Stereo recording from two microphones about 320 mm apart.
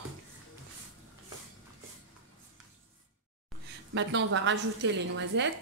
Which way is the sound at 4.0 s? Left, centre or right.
Right.